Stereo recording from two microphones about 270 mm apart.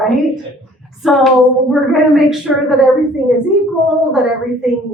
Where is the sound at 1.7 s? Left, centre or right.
Centre.